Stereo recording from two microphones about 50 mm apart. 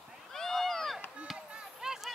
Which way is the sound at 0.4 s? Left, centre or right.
Centre.